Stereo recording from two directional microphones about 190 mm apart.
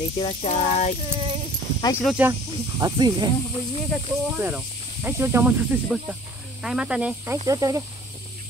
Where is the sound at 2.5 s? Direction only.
20° right (ahead or behind).